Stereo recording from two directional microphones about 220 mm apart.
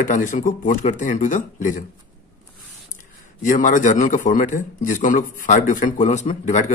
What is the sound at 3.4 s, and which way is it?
A man's voice, 35° left (ahead or behind).